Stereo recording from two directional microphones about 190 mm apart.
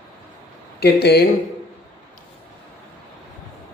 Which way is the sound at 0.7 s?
60° left (ahead or behind).